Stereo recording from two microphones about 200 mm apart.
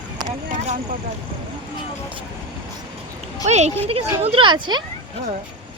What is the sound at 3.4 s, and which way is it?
Speech, 35° right (ahead or behind).